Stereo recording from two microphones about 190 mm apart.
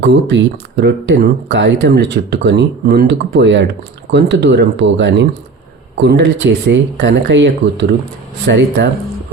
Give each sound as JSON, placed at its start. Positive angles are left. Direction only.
{"t": 0.0, "sound": "speech", "side_deg": -65}